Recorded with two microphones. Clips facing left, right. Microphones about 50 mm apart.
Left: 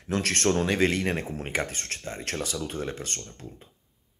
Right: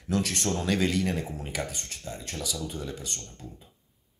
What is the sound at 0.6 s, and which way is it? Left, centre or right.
Speech, left.